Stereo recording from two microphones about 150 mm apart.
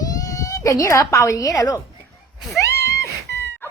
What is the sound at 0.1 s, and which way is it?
Speech, 25° left (ahead or behind).